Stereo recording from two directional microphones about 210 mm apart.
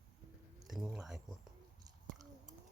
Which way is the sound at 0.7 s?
Centre (ahead or behind).